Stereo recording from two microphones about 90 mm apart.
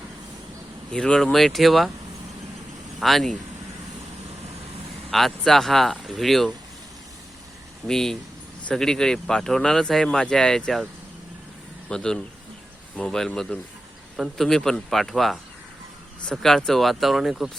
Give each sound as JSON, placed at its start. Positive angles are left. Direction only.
{"t": 0.9, "sound": "speech", "side_deg": 10}
{"t": 3.0, "sound": "speech", "side_deg": 0}
{"t": 5.1, "sound": "speech", "side_deg": 5}
{"t": 7.9, "sound": "speech", "side_deg": 5}
{"t": 11.9, "sound": "speech", "side_deg": 10}